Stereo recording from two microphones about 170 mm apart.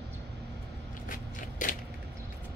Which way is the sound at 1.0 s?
50° left (ahead or behind).